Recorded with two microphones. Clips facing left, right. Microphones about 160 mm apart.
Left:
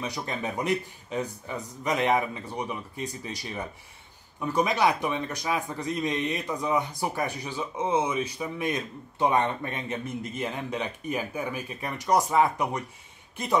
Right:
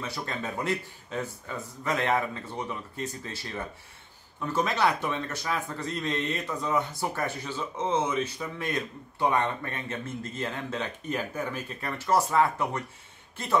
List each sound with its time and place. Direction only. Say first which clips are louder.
0.0 s a man's voice: left 2 dB; 15° left (ahead or behind)